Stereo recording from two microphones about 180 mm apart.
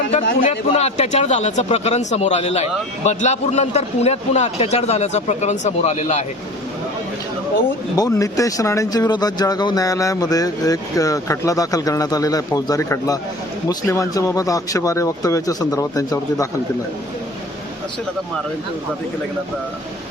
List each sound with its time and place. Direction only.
0.4 s a man's voice: 35° left (ahead or behind)
7.9 s speech: 20° left (ahead or behind)